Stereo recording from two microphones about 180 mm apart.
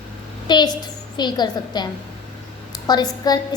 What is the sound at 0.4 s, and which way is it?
A woman's voice, 25° left (ahead or behind).